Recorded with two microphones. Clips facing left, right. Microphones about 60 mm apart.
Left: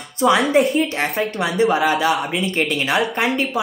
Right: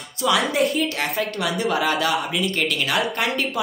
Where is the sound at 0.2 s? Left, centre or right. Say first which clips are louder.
Left 5 dB; left.